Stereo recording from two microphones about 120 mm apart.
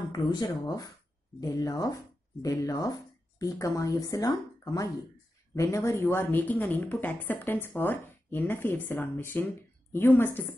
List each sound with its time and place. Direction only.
0.1 s speech: 35° left (ahead or behind); by 10.4 s 15° left (ahead or behind)